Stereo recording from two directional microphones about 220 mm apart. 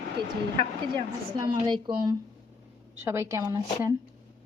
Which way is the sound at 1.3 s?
15° right (ahead or behind).